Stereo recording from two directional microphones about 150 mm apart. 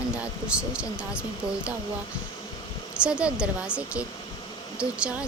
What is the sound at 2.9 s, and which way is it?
Speech, 5° right (ahead or behind).